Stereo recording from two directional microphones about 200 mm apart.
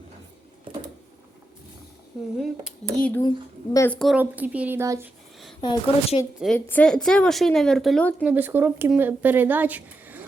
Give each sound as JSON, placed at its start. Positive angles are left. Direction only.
{"t": 2.4, "sound": "a woman's voice", "side_deg": 0}
{"t": 3.2, "sound": "speech", "side_deg": 15}
{"t": 3.9, "sound": "a woman's voice", "side_deg": 0}
{"t": 5.5, "sound": "a woman's voice", "side_deg": 25}
{"t": 6.4, "sound": "a woman's voice", "side_deg": 5}